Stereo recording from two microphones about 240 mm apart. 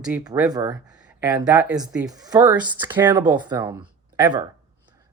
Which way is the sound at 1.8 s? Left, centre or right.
Centre.